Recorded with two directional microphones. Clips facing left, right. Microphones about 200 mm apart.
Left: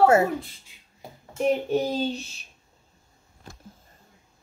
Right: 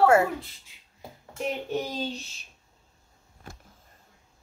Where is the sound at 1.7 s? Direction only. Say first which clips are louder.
Left 6 dB; 30° left (ahead or behind).